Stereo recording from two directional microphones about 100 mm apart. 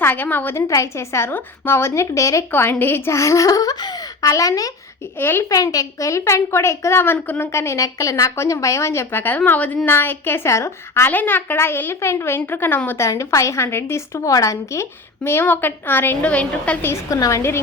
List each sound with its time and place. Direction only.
0.0 s a woman's voice: 20° left (ahead or behind)
2.5 s speech: 20° left (ahead or behind)
5.1 s a woman's voice: 25° left (ahead or behind)
5.5 s a woman's voice: 35° left (ahead or behind); by 13.1 s 20° left (ahead or behind)
13.1 s a woman's voice: 30° left (ahead or behind); by 16.7 s 15° left (ahead or behind)
16.8 s a woman's voice: 25° left (ahead or behind)